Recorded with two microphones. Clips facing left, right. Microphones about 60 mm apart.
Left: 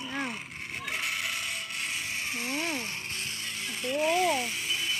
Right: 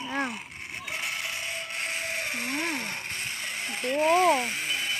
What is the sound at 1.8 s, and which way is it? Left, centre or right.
Ratchet, right.